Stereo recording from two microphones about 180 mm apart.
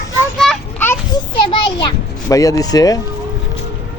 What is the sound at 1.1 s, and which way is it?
Children playing, 25° left (ahead or behind).